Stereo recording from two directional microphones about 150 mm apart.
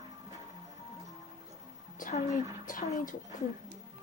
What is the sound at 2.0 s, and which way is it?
Speech, 60° left (ahead or behind).